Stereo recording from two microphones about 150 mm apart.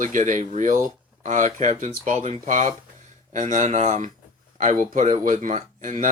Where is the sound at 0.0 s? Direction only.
60° right (ahead or behind).